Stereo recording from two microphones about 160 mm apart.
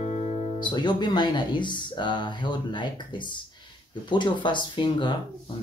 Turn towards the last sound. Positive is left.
turn(degrees=30)  # may be behind; listen again after turning